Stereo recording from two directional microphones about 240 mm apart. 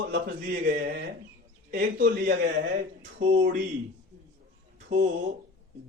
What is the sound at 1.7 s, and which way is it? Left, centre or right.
Speech, right.